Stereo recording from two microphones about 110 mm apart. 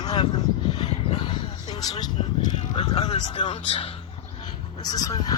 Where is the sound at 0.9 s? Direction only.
90° left.